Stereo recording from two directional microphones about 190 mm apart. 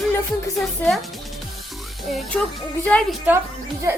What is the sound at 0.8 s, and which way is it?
Speech, 10° left (ahead or behind).